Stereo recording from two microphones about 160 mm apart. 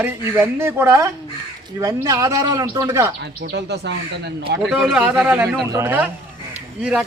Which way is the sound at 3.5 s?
90° right.